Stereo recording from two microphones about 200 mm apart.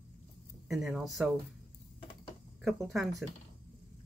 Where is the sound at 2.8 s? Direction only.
Centre (ahead or behind).